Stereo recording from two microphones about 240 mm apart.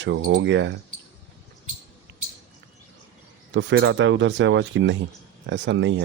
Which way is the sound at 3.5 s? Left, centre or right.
Right.